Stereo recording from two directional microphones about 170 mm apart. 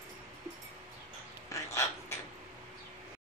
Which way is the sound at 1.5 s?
15° left (ahead or behind).